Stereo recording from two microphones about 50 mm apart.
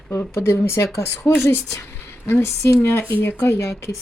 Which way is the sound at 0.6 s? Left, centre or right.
Left.